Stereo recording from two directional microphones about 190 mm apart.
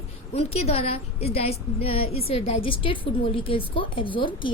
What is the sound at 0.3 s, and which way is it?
A woman's voice, 30° left (ahead or behind).